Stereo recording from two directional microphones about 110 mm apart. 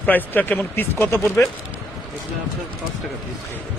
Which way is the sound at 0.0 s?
15° left (ahead or behind).